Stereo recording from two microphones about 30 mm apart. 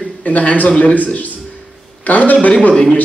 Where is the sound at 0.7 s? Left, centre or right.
Left.